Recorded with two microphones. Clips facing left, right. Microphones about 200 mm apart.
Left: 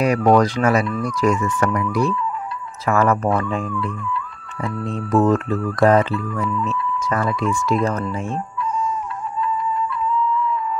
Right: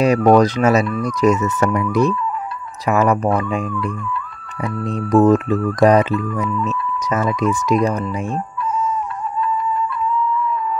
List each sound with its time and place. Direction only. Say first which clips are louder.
0.0 s speech: right 3 dB; 25° right (ahead or behind)
4.6 s speech: right 3 dB; 15° right (ahead or behind)